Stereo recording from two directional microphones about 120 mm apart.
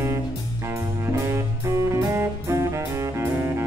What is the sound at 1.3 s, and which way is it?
Music, 25° right (ahead or behind).